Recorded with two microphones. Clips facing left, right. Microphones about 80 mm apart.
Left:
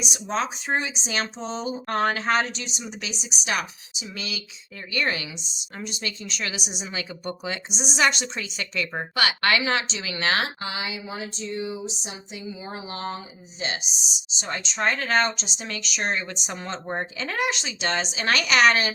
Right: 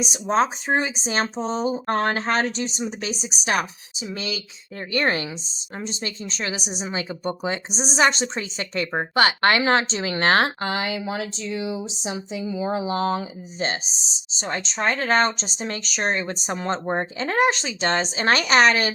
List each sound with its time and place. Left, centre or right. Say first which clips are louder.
0.0 s speech: right 6 dB; right
5.8 s speech: right 2 dB; right
13.6 s speech: right 4 dB; right